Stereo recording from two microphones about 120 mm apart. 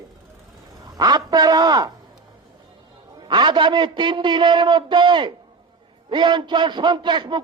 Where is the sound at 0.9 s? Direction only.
35° right (ahead or behind).